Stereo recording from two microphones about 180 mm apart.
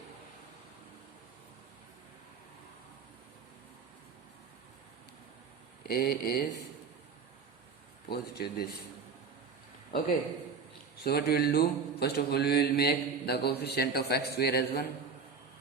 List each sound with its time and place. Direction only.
5.9 s mantra: 60° left (ahead or behind)
8.1 s mantra: 60° left (ahead or behind)
11.0 s mantra: 60° left (ahead or behind)